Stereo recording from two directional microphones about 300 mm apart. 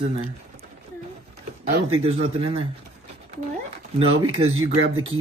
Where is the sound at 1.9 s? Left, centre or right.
Centre.